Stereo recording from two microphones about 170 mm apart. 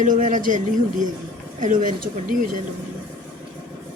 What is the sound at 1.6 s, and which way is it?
Speech, 50° right (ahead or behind).